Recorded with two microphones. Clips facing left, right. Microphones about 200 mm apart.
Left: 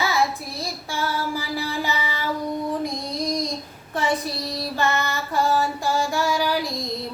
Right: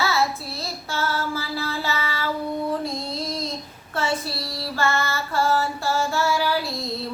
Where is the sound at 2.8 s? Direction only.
15° left (ahead or behind).